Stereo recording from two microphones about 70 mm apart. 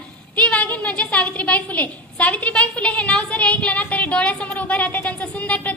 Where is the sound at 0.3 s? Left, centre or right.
Centre.